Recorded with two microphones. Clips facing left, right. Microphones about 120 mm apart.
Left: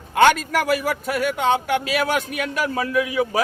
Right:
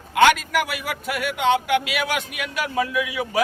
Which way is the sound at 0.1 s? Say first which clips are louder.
Left 1 dB; 40° left (ahead or behind).